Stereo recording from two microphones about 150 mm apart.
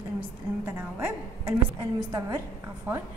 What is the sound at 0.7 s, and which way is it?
Speech, 15° right (ahead or behind).